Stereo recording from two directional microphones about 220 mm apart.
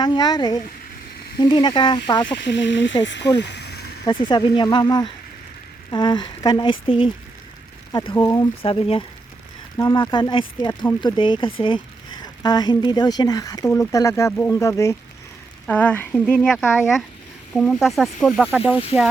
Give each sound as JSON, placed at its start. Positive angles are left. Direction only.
{"t": 0.0, "sound": "speech", "side_deg": 20}
{"t": 2.2, "sound": "speech", "side_deg": 55}
{"t": 3.3, "sound": "a sound", "side_deg": 50}
{"t": 4.3, "sound": "speech", "side_deg": 20}